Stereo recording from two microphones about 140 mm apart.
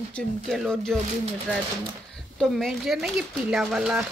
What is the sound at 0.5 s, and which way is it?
Speech, centre (ahead or behind).